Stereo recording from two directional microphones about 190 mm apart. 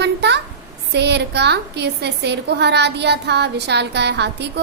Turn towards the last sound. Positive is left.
turn(degrees=-65)  # may be behind; listen again after turning